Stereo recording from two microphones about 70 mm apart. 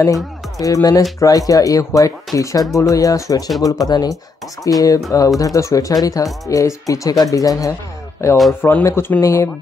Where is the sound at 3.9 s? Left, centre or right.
Left.